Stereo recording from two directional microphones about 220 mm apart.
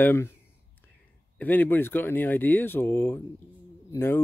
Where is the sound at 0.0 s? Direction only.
10° left (ahead or behind).